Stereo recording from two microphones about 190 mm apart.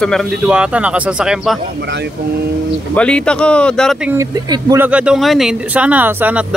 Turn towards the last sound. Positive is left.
turn(degrees=-10)  # may be behind; listen again after turning